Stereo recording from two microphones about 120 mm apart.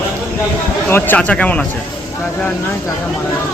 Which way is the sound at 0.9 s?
15° left (ahead or behind).